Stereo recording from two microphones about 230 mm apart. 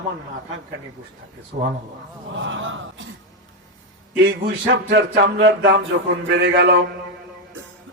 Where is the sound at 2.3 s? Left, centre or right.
Right.